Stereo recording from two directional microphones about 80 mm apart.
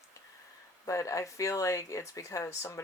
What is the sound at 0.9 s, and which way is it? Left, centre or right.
Speech, left.